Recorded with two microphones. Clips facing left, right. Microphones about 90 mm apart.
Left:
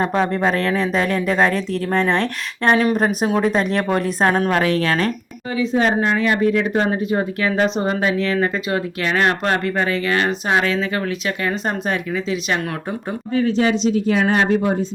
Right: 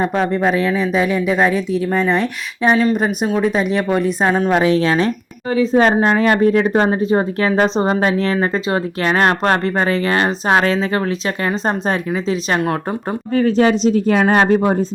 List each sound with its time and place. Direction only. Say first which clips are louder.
0.0 s speech: right 2 dB; centre (ahead or behind)
4.5 s speech: right 4 dB; 20° right (ahead or behind)
5.8 s speech: right 4 dB; 45° right (ahead or behind)
13.3 s speech: right 4 dB; 45° right (ahead or behind)